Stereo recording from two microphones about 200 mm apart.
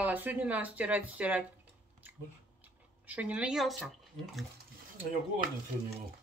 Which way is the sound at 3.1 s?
5° right (ahead or behind).